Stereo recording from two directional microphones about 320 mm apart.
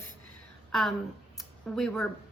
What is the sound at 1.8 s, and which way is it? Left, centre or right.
Speech, centre.